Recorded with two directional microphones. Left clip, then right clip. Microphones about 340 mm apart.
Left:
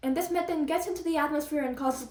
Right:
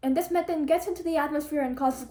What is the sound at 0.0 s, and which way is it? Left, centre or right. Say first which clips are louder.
A woman's voice: right 3 dB; centre.